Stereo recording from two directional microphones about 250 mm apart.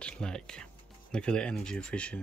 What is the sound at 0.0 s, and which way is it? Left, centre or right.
Speech, centre.